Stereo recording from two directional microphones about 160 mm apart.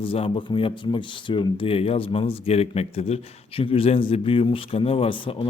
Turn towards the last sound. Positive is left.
turn(degrees=35)  # may be behind; listen again after turning